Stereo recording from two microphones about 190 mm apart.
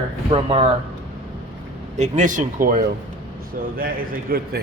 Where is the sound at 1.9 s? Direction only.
40° right (ahead or behind).